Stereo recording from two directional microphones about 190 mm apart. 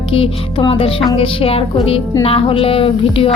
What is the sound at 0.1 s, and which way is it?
Speech, 30° left (ahead or behind).